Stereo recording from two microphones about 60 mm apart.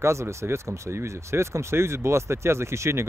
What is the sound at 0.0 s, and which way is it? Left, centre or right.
Speech, right.